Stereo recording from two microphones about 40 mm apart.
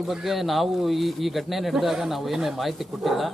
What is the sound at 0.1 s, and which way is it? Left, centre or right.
Speech, centre.